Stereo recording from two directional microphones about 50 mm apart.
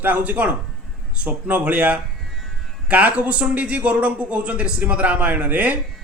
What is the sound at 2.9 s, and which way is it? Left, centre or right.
A man's voice, right.